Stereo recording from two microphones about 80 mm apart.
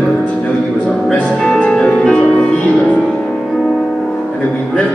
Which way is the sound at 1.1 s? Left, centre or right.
Centre.